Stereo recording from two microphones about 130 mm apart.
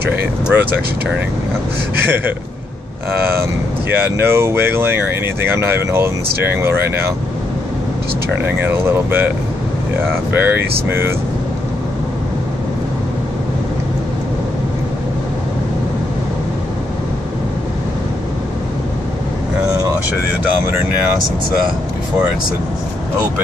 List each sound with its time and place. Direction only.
0.1 s speech: 15° right (ahead or behind)
3.9 s speech: 15° right (ahead or behind)
8.3 s speech: 15° right (ahead or behind)